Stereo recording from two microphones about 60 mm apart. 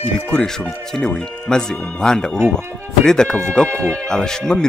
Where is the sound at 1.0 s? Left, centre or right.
Centre.